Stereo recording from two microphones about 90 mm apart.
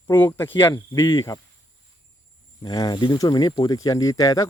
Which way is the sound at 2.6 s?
45° left (ahead or behind).